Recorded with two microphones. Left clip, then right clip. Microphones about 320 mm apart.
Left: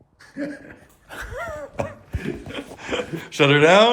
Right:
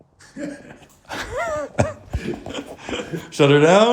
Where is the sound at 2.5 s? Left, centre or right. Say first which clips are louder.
Left 1 dB; centre.